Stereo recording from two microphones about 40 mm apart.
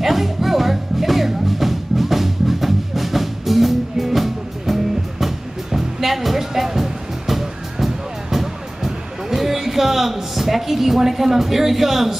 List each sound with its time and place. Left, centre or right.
0.0 s music: centre